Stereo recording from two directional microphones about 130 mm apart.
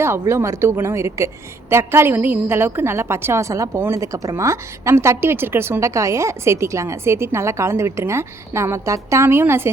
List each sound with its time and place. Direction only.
0.0 s a woman's voice: 20° right (ahead or behind)